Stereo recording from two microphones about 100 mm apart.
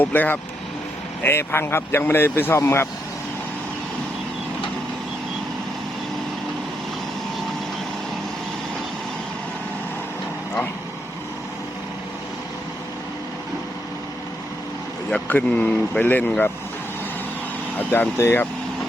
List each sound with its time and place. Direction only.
0.0 s speech: 20° left (ahead or behind)
15.1 s speech: 15° left (ahead or behind)
17.7 s speech: 20° left (ahead or behind)